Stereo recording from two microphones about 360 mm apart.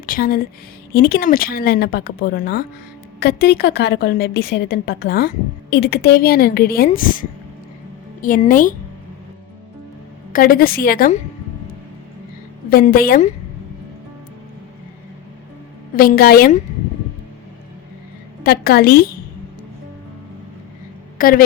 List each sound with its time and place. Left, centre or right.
0.0 s a woman's voice: left
10.3 s a woman's voice: left
12.7 s a woman's voice: left
16.0 s a woman's voice: left
18.4 s a woman's voice: left
21.2 s speech: left